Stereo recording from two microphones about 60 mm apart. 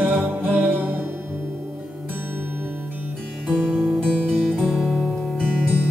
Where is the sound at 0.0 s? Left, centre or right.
Right.